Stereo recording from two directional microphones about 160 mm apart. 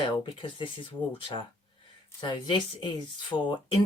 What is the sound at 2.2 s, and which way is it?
Speech, 30° left (ahead or behind).